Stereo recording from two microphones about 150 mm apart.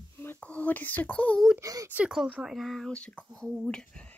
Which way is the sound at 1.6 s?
20° right (ahead or behind).